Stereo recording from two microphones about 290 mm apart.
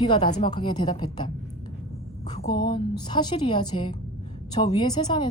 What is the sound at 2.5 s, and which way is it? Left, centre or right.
A woman's voice, centre.